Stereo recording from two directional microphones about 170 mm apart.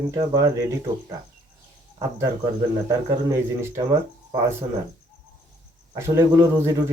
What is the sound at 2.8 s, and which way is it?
Speech, 20° right (ahead or behind).